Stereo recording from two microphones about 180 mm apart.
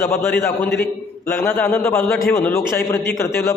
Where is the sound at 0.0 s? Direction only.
15° left (ahead or behind).